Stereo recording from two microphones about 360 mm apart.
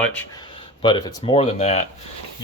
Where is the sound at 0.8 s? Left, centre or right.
Centre.